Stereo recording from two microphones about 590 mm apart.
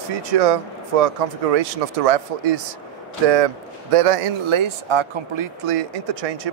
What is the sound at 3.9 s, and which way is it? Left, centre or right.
Speech, right.